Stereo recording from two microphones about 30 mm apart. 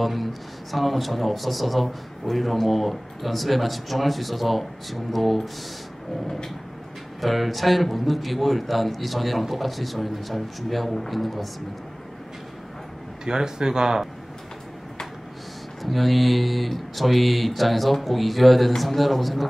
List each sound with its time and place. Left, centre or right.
0.0 s speech: centre
7.2 s speech: centre
13.2 s speech: right
15.8 s speech: centre